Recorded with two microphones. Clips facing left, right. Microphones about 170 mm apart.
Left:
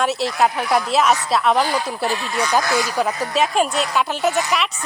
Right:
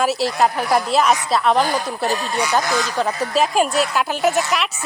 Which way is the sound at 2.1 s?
40° right (ahead or behind).